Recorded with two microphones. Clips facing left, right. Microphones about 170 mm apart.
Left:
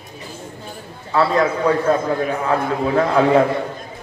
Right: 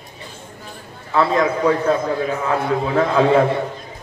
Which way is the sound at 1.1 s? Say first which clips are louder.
Even; 35° left (ahead or behind).